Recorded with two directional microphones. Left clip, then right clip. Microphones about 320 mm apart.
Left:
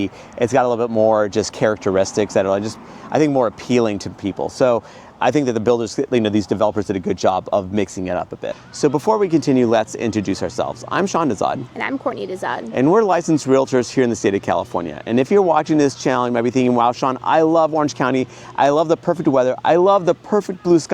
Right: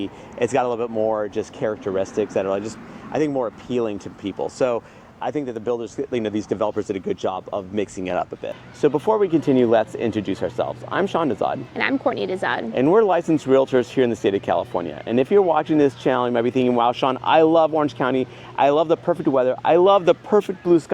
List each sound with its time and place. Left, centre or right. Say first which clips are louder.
0.3 s speech: left 4 dB; left
3.4 s speech: left 6 dB; left
4.4 s speech: left 5 dB; left
5.2 s speech: left 9 dB; left
6.5 s speech: left 4 dB; left
8.0 s speech: left 2 dB; left
11.8 s speech: right 5 dB; centre
12.7 s speech: left 2 dB; left